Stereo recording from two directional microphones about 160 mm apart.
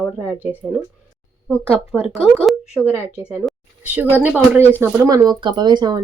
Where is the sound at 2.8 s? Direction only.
10° right (ahead or behind).